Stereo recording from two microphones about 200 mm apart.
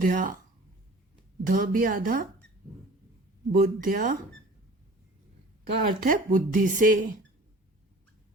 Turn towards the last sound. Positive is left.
turn(degrees=-40)  # may be behind; listen again after turning